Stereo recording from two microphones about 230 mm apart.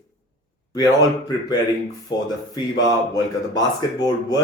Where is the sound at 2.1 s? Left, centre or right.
Centre.